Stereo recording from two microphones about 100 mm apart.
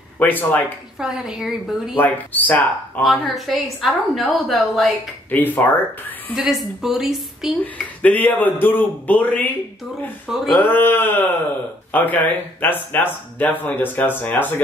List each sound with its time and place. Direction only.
0.2 s speech: 20° left (ahead or behind)
0.9 s a woman's voice: 5° right (ahead or behind)
2.0 s speech: 15° left (ahead or behind)
3.0 s a woman's voice: centre (ahead or behind)
5.3 s speech: 20° left (ahead or behind)
6.3 s a woman's voice: 5° right (ahead or behind)
7.6 s speech: 15° left (ahead or behind)
10.2 s a woman's voice: centre (ahead or behind)
10.6 s speech: 20° left (ahead or behind)